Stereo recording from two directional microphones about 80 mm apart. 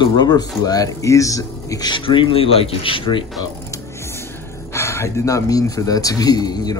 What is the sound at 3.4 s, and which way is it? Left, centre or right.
Speech, left.